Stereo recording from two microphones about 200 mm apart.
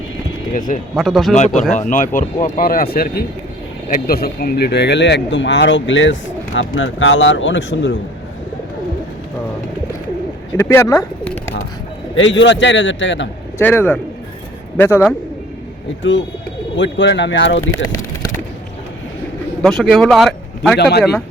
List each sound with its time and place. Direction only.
0.5 s speech: 40° left (ahead or behind)
0.9 s speech: centre (ahead or behind)
1.8 s speech: 40° left (ahead or behind); by 7.9 s 65° left (ahead or behind)
10.6 s speech: 15° left (ahead or behind)
12.1 s speech: 70° left (ahead or behind)
13.6 s speech: 10° left (ahead or behind)
16.7 s speech: 65° left (ahead or behind)
19.6 s speech: centre (ahead or behind)